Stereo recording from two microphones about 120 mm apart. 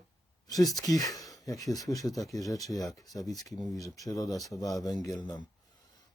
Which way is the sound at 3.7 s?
25° left (ahead or behind).